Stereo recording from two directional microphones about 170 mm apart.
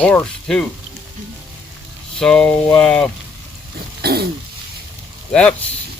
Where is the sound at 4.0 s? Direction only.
65° right (ahead or behind).